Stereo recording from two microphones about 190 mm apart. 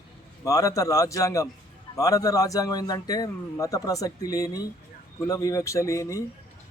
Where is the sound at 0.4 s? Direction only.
15° left (ahead or behind).